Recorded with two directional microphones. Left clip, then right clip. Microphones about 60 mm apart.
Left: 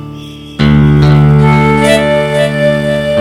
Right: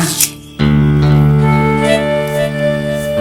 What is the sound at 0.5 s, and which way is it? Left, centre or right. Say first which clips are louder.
Music: left 4 dB; left.